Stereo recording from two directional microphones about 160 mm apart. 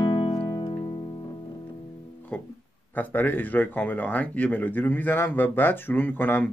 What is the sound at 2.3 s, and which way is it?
Speech, 10° left (ahead or behind).